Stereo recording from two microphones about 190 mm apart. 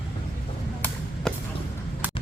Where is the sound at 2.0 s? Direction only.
10° right (ahead or behind).